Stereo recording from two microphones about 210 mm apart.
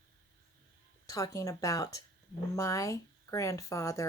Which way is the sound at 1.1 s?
15° left (ahead or behind).